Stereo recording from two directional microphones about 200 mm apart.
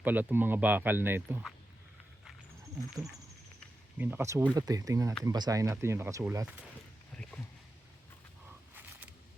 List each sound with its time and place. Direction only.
0.0 s speech: 10° right (ahead or behind)
3.9 s speech: 10° right (ahead or behind)
7.1 s a sound: 5° left (ahead or behind)